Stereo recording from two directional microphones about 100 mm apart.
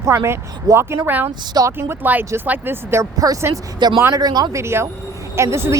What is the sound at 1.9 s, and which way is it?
Speech, 20° right (ahead or behind).